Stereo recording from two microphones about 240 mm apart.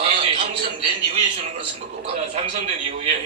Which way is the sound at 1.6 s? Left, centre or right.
Right.